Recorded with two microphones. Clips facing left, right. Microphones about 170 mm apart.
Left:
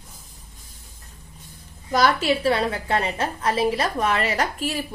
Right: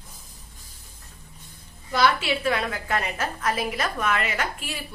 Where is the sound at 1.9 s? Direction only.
40° left (ahead or behind).